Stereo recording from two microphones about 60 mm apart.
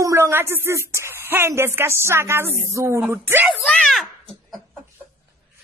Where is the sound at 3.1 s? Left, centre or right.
Right.